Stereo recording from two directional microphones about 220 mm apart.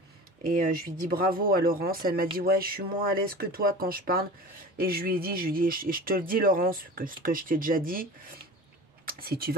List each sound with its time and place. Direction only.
0.5 s speech: 40° right (ahead or behind)